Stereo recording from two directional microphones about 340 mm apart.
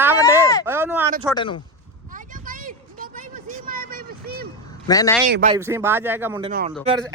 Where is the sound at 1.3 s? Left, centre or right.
Centre.